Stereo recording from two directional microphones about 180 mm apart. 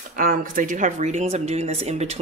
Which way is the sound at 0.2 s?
50° right (ahead or behind).